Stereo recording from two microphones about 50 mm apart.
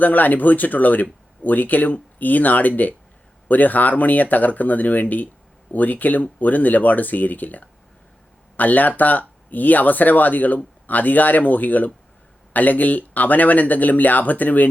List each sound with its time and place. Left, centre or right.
0.0 s speech: left